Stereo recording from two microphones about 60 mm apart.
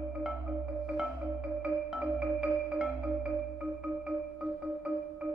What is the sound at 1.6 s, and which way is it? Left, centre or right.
Music, centre.